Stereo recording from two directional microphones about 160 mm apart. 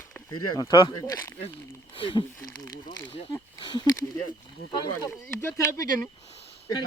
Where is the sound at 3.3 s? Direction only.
25° left (ahead or behind).